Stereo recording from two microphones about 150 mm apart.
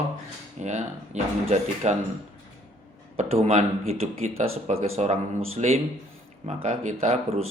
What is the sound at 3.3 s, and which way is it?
A man's voice, 45° right (ahead or behind).